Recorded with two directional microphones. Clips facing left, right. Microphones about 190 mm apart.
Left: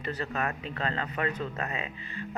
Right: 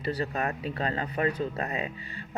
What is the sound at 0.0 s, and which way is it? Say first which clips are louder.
Speech: right 2 dB; 35° right (ahead or behind).